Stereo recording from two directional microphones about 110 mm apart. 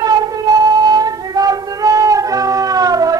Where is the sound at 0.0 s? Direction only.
35° right (ahead or behind).